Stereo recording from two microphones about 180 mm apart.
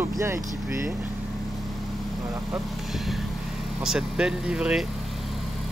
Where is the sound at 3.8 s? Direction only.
5° right (ahead or behind).